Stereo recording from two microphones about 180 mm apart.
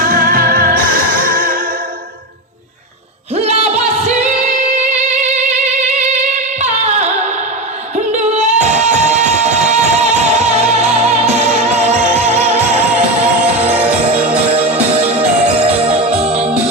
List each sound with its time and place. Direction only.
0.0 s music: 55° right (ahead or behind)
3.3 s music: 35° right (ahead or behind)
6.6 s music: 40° right (ahead or behind)